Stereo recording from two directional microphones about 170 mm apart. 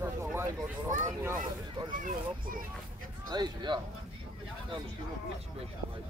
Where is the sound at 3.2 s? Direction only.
25° right (ahead or behind).